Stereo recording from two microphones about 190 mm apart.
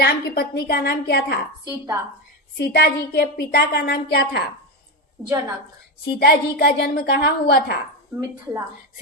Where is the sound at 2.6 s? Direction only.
55° left (ahead or behind).